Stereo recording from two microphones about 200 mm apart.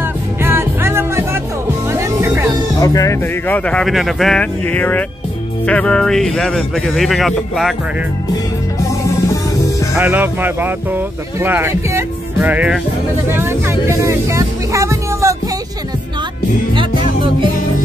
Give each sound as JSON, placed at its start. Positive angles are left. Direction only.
{"t": 0.0, "sound": "music", "side_deg": -10}
{"t": 2.8, "sound": "speech", "side_deg": 15}
{"t": 9.9, "sound": "speech", "side_deg": -10}
{"t": 13.3, "sound": "music", "side_deg": -10}
{"t": 16.7, "sound": "music", "side_deg": -25}